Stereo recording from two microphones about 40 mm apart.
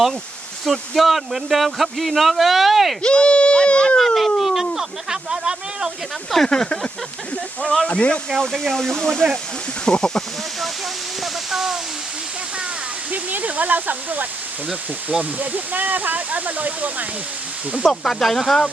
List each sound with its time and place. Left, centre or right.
0.6 s speech: centre
3.0 s sheep: left
3.9 s a sound: centre
6.3 s speech: centre
7.9 s speech: left
8.7 s speech: centre
9.8 s speech: left
11.2 s speech: centre
13.1 s speech: right
18.0 s speech: centre